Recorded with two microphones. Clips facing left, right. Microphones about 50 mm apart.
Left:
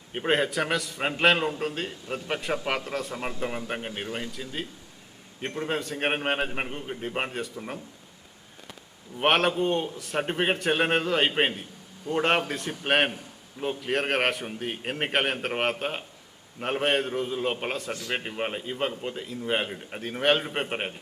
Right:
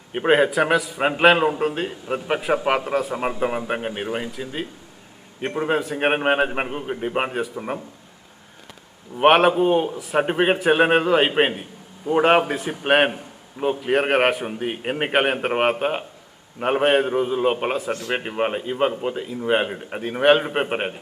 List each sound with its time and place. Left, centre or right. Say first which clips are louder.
0.1 s a man's voice: right 8 dB; centre
9.1 s a man's voice: right 8 dB; centre